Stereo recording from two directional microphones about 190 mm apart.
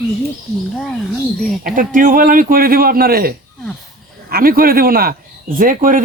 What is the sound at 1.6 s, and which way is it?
A man's voice, 45° right (ahead or behind).